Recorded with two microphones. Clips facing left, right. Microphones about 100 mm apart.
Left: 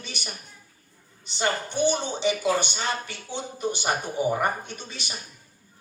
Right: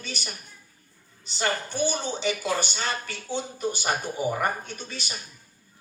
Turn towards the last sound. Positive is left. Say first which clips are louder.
# right 1 dB
turn(degrees=20)  # may be behind; listen again after turning